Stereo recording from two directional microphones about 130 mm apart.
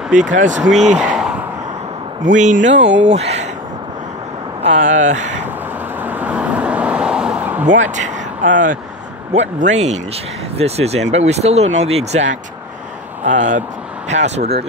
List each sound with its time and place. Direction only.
0.1 s speech: 75° right (ahead or behind)
0.9 s a sound: 5° right (ahead or behind)
2.2 s speech: 70° right (ahead or behind); by 3.4 s 55° right (ahead or behind)
4.6 s speech: 65° right (ahead or behind)
6.0 s vehicle: 10° right (ahead or behind)
7.9 s speech: 70° right (ahead or behind)
9.3 s speech: 65° right (ahead or behind)